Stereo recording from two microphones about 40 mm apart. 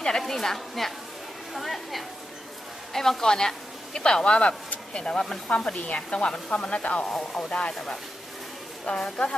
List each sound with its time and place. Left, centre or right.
0.2 s a woman's voice: centre; by 7.7 s left
7.7 s a woman's voice: centre
8.8 s speech: left